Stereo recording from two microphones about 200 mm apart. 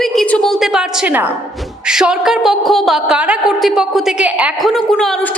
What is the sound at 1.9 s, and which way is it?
A woman's voice, 5° right (ahead or behind).